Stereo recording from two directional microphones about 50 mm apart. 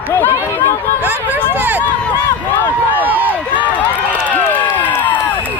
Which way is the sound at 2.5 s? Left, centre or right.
Left.